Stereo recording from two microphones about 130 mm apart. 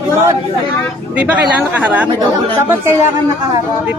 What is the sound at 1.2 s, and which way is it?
A woman's voice, 10° right (ahead or behind).